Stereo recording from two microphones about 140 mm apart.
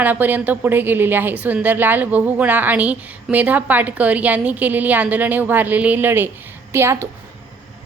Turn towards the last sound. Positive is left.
turn(degrees=-20)  # may be behind; listen again after turning